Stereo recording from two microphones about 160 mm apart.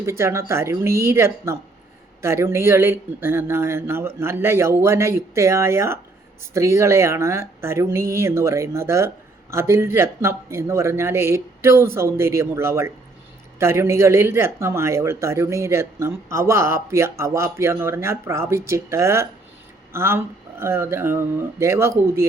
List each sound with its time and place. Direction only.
0.0 s speech: 15° right (ahead or behind)